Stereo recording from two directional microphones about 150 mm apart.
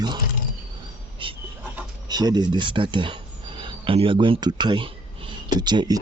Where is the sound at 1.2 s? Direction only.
35° right (ahead or behind).